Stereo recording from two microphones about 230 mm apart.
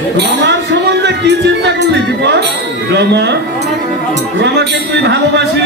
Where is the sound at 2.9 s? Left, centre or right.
Right.